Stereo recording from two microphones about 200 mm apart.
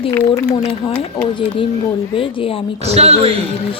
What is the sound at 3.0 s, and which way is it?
Speech, 30° right (ahead or behind).